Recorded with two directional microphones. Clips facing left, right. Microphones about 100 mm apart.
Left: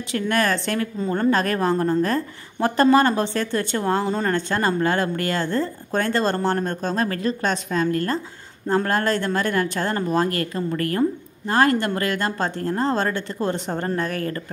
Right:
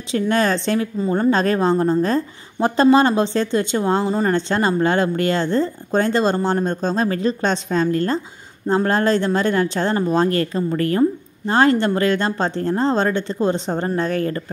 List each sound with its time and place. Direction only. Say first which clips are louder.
0.1 s a woman's voice: right 4 dB; 20° right (ahead or behind)